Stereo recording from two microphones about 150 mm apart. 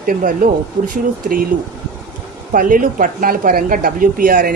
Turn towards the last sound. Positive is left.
turn(degrees=-70)  # may be behind; listen again after turning